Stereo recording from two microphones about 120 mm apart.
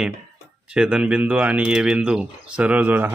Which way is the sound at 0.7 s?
10° right (ahead or behind).